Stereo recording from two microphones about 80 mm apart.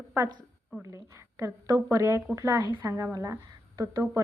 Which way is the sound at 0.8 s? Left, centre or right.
Right.